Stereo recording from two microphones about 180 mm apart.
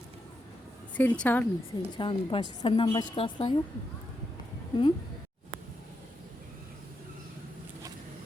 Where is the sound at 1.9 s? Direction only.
25° left (ahead or behind).